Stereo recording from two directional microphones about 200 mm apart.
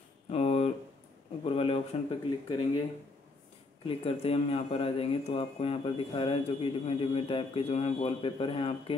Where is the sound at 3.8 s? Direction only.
30° left (ahead or behind).